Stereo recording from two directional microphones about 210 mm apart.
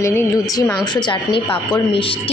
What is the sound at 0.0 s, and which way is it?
Speech, 15° left (ahead or behind).